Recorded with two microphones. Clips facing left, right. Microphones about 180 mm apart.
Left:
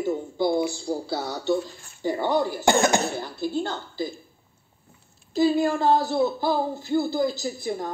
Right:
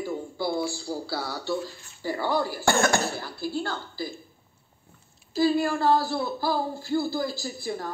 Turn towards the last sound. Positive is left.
turn(degrees=20)  # may be behind; listen again after turning